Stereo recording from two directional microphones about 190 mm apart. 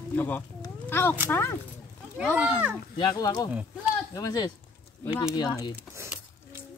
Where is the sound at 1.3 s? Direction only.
10° left (ahead or behind).